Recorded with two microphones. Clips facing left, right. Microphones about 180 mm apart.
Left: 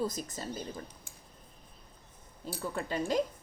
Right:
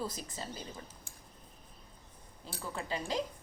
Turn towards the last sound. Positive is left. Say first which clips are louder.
# left 5 dB
turn(degrees=50)  # may be behind; listen again after turning